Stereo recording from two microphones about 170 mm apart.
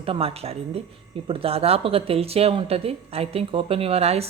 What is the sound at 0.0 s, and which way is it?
Speech, 35° right (ahead or behind).